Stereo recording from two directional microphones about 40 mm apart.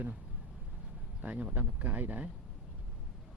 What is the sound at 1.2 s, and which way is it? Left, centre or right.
Speech, right.